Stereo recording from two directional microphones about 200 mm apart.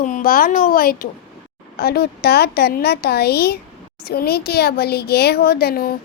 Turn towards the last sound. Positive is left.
turn(degrees=50)  # may be behind; listen again after turning